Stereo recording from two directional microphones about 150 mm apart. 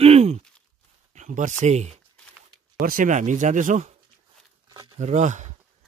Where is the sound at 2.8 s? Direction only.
65° right (ahead or behind).